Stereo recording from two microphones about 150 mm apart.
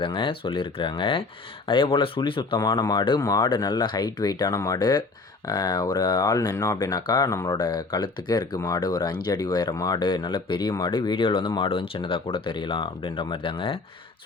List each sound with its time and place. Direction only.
0.0 s speech: 35° left (ahead or behind)